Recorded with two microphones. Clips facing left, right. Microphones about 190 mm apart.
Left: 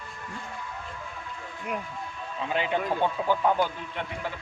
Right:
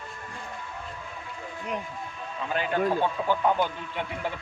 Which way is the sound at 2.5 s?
20° left (ahead or behind).